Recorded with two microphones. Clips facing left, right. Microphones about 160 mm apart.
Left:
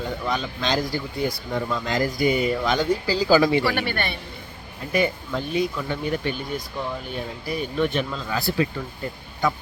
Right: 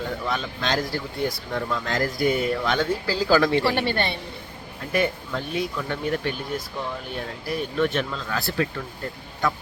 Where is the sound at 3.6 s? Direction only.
30° right (ahead or behind).